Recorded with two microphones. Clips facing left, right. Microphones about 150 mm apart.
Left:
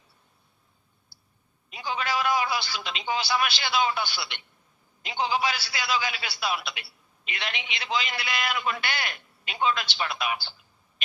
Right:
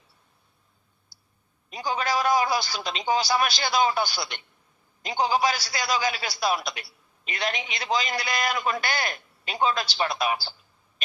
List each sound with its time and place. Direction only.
1.1 s clicking: 40° right (ahead or behind)
1.7 s a man's voice: 40° right (ahead or behind)